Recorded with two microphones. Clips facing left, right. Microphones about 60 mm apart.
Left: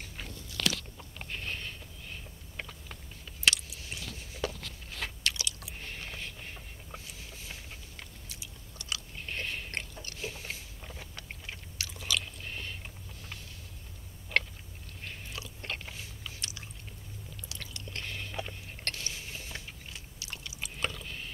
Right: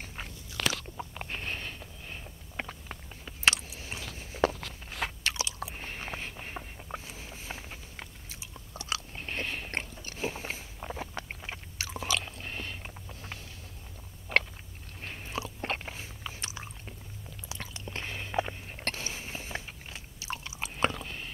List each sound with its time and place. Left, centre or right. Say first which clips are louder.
0.0 s biting: right 2 dB; right
3.4 s a sound: right 2 dB; right
4.6 s a sound: right 4 dB; right
10.9 s chewing: right 9 dB; right
15.0 s chewing: right 6 dB; right
17.5 s biting: right 5 dB; right